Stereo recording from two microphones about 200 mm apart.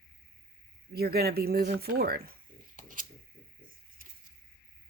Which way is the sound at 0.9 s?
50° right (ahead or behind).